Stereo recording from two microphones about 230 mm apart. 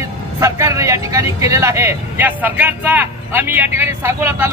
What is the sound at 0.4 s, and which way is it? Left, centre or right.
Speech, centre.